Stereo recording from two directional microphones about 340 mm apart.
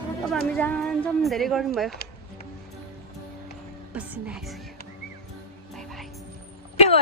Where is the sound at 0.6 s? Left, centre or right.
Centre.